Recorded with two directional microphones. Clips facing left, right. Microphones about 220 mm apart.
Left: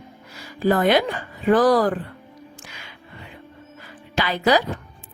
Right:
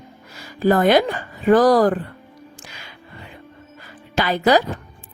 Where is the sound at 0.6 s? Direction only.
45° right (ahead or behind).